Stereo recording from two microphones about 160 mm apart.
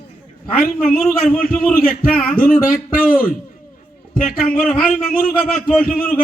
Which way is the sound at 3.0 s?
65° left (ahead or behind).